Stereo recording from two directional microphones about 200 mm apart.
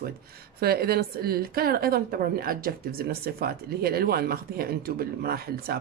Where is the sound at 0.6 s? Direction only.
50° right (ahead or behind).